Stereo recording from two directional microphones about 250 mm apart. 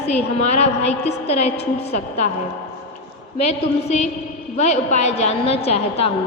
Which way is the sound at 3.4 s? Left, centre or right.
Left.